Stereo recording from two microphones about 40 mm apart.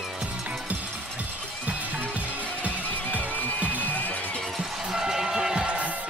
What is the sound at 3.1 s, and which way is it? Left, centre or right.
Music, right.